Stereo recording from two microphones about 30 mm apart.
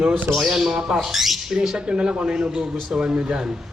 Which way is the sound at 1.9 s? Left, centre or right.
Right.